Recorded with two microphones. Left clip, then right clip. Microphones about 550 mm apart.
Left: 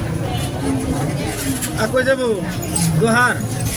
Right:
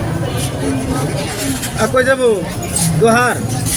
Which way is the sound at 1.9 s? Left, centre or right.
Left.